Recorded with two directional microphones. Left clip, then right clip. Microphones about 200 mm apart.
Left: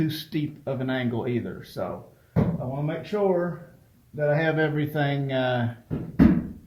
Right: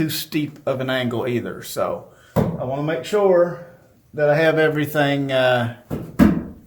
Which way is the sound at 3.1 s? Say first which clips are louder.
Right 7 dB; 20° right (ahead or behind).